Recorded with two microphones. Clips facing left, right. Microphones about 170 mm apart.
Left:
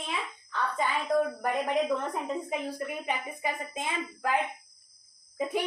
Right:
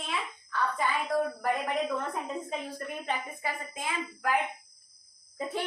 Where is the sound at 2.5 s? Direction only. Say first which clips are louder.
Left 3 dB; 10° left (ahead or behind).